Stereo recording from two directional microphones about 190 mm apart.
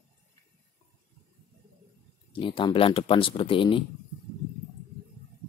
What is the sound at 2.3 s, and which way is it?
Speech, 25° left (ahead or behind).